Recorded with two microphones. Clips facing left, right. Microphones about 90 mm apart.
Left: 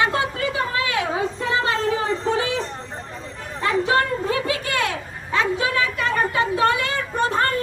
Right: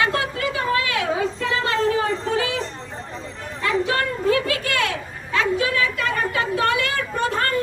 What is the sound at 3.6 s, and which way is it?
Chatter, 30° left (ahead or behind).